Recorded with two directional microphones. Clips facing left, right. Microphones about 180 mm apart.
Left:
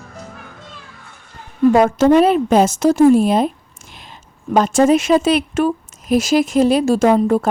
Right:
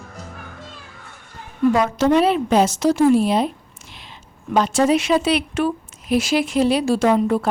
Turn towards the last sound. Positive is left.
turn(degrees=45)  # may be behind; listen again after turning